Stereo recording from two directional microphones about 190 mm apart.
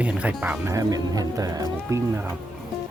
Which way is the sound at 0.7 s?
20° right (ahead or behind).